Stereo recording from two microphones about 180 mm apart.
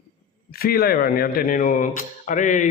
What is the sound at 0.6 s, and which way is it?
A man's voice, 55° left (ahead or behind).